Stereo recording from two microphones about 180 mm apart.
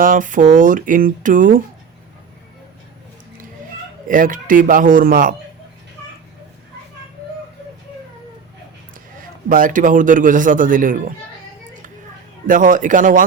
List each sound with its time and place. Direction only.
0.0 s a man's voice: 45° right (ahead or behind)
4.1 s a man's voice: 50° right (ahead or behind)
9.1 s a man's voice: 50° right (ahead or behind)
12.5 s a man's voice: 45° right (ahead or behind)